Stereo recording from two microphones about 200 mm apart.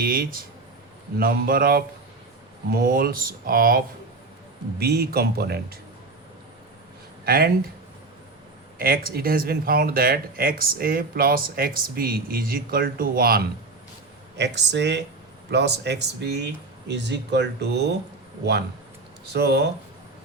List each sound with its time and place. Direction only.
0.0 s speech: 45° right (ahead or behind)
7.3 s speech: 50° right (ahead or behind)
8.8 s speech: 45° right (ahead or behind)
19.3 s speech: 55° right (ahead or behind)